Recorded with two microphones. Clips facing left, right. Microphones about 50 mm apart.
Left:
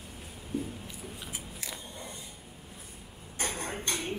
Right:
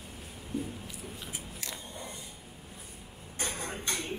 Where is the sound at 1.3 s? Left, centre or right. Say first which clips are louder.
Even; centre.